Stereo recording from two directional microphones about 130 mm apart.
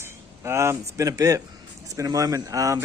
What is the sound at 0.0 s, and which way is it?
Speech, 20° right (ahead or behind).